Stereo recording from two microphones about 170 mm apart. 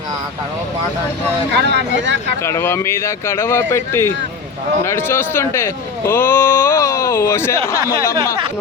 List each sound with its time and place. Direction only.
1.5 s speech: 90° right
2.4 s speech: 15° left (ahead or behind)